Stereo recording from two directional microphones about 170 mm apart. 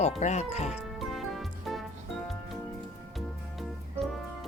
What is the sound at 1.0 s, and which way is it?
Music, centre (ahead or behind).